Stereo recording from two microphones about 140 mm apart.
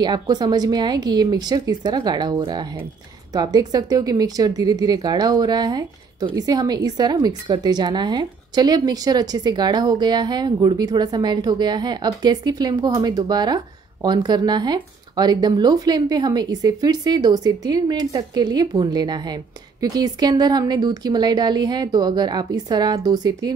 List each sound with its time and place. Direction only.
0.0 s speech: 30° right (ahead or behind)